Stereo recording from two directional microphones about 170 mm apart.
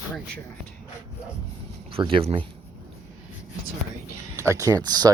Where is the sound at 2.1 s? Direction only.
35° right (ahead or behind).